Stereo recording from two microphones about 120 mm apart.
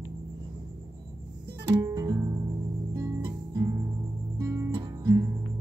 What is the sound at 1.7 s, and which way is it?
Music, 30° right (ahead or behind).